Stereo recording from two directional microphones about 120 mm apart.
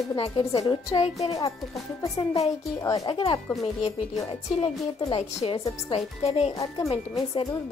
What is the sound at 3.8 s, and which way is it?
Music, 60° left (ahead or behind).